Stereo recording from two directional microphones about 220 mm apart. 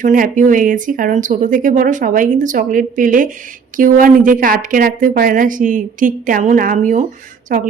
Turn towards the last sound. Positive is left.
turn(degrees=-40)  # may be behind; listen again after turning